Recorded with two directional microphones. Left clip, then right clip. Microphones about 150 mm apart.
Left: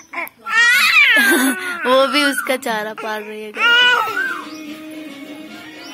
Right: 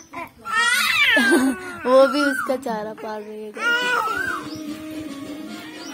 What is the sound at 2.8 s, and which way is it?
Music, 25° left (ahead or behind).